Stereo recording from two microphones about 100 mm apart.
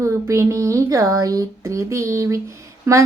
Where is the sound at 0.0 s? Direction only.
30° right (ahead or behind).